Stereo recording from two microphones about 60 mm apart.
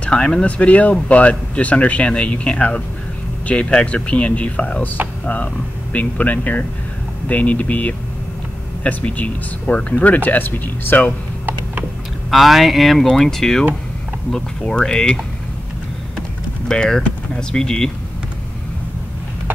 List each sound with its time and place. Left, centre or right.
0.0 s speech: centre; by 11.1 s left
12.3 s speech: centre
16.2 s typing: centre